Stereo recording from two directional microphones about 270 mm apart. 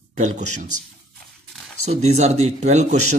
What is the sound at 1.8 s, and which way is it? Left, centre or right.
Speech, right.